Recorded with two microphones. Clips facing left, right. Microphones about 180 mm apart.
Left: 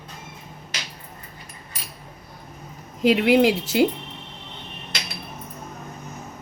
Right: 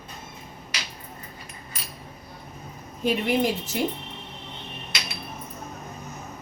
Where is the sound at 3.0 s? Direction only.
85° left.